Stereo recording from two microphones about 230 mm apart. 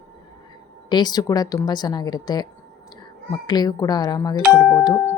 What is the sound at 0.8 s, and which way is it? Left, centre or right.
Speech, centre.